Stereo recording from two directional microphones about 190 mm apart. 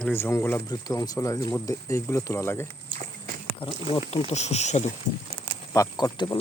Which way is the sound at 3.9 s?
30° left (ahead or behind).